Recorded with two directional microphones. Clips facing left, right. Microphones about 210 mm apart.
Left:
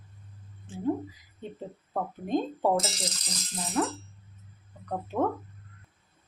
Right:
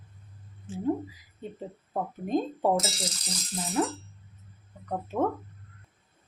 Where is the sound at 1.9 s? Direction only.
10° right (ahead or behind).